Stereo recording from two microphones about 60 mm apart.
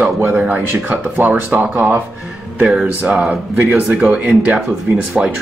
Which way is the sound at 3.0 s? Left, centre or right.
Centre.